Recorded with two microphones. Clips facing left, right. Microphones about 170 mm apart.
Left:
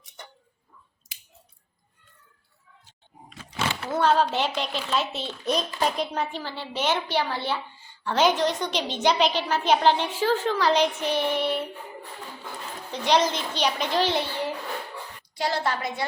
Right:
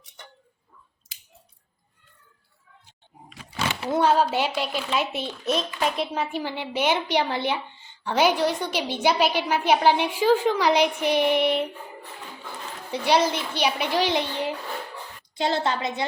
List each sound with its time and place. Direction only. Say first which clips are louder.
3.8 s a woman's voice: right 2 dB; 15° right (ahead or behind)
12.9 s a woman's voice: right 1 dB; 10° right (ahead or behind)